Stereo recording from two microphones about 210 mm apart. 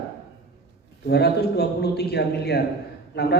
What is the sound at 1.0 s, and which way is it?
A man's voice, 50° left (ahead or behind).